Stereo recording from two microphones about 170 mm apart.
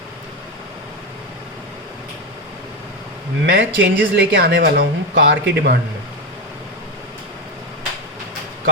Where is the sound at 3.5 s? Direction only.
90° right.